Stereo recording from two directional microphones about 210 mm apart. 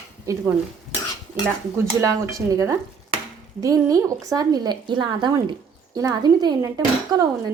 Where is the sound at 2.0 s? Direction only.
15° right (ahead or behind).